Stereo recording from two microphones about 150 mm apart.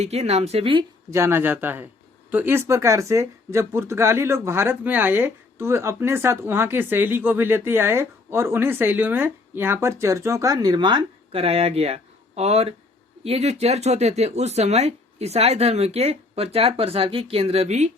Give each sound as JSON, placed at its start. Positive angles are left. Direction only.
{"t": 0.0, "sound": "speech", "side_deg": -45}
{"t": 1.1, "sound": "speech", "side_deg": -15}